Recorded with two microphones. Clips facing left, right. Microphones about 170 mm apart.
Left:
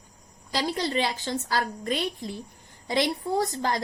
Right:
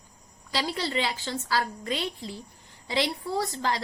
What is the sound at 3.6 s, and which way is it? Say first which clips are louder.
Speech: left 1 dB; 45° left (ahead or behind).